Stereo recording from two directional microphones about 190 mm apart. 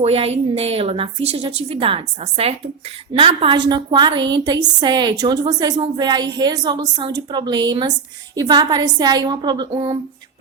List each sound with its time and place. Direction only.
0.0 s a woman's voice: 30° right (ahead or behind)